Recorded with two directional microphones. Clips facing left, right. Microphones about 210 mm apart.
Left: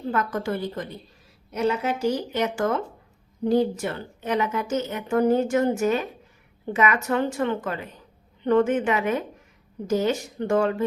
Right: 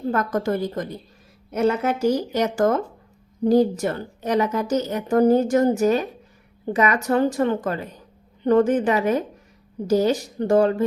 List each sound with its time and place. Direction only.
0.1 s a woman's voice: 40° right (ahead or behind)